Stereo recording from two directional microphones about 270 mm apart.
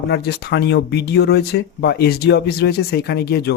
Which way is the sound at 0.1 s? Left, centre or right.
Left.